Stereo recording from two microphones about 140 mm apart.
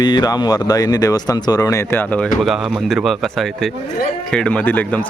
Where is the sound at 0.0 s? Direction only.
30° left (ahead or behind); by 2.3 s 10° left (ahead or behind).